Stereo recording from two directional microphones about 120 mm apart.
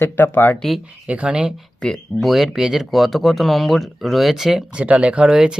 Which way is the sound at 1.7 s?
5° left (ahead or behind).